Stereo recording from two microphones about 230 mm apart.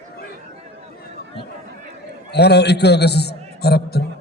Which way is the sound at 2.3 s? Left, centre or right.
Left.